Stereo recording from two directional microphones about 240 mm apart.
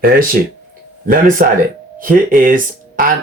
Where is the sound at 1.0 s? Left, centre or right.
Right.